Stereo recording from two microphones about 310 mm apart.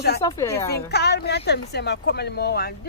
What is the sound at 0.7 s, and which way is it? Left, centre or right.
Speech, left.